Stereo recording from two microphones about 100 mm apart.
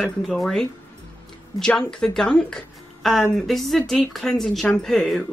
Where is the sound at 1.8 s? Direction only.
5° left (ahead or behind).